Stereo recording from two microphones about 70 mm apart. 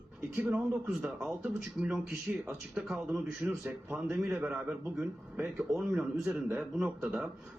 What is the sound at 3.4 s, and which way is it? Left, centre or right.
A man's voice, centre.